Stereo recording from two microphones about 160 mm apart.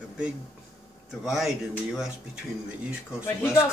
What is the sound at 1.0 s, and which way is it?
Speech, centre (ahead or behind).